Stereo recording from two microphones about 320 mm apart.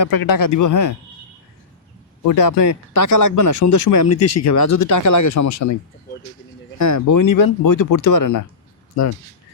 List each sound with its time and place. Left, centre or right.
0.0 s speech: left
2.2 s speech: left
6.7 s speech: left